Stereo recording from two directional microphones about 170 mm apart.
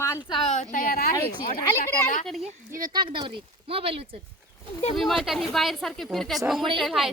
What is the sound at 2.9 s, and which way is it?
Speech, 25° right (ahead or behind).